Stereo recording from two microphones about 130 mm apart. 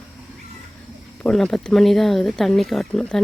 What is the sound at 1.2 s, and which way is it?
Speech, 5° left (ahead or behind).